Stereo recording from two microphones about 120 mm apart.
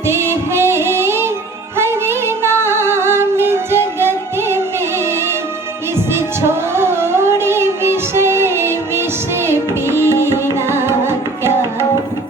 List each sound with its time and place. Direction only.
0.1 s music: 20° right (ahead or behind)
6.1 s music: 20° right (ahead or behind)